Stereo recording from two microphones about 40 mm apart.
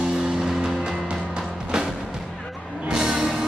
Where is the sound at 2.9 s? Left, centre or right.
Centre.